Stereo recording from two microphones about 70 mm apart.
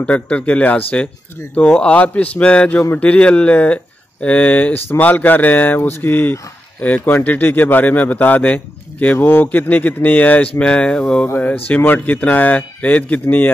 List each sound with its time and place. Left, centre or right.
0.0 s speech: centre
5.8 s speech: left; by 11.2 s centre
11.3 s speech: left